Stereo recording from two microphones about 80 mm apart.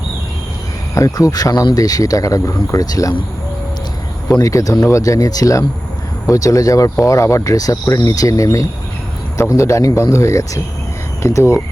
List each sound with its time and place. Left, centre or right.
0.9 s speech: left
4.3 s speech: left